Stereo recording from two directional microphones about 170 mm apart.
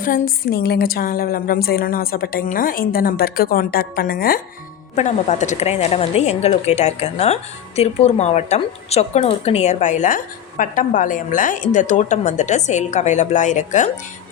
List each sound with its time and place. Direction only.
0.0 s a woman's voice: 55° left (ahead or behind)
4.9 s a woman's voice: 45° left (ahead or behind)